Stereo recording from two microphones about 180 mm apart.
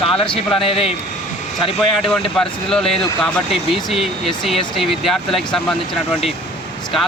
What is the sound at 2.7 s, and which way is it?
Speech, 5° left (ahead or behind).